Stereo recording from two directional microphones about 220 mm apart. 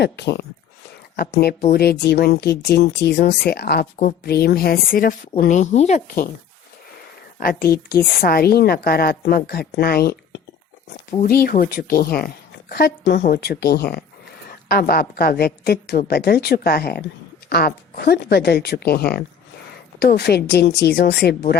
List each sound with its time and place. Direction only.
0.0 s a woman's voice: 50° left (ahead or behind)
7.3 s a woman's voice: 40° left (ahead or behind)